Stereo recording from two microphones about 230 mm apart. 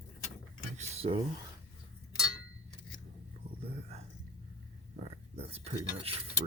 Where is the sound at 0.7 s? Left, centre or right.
Right.